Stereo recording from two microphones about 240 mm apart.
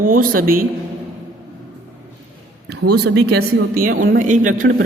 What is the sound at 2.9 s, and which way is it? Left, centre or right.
A woman's voice, right.